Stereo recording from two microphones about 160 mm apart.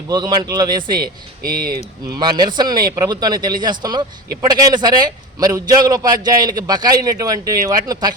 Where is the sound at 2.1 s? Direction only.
25° right (ahead or behind).